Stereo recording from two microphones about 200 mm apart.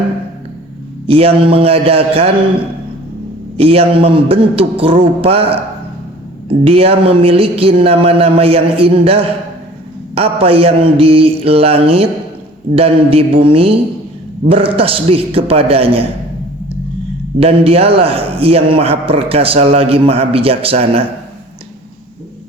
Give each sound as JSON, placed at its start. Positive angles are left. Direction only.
{"t": 1.0, "sound": "a man's voice", "side_deg": -30}
{"t": 3.6, "sound": "a man's voice", "side_deg": -30}
{"t": 6.7, "sound": "a man's voice", "side_deg": -30}
{"t": 17.4, "sound": "a man's voice", "side_deg": -30}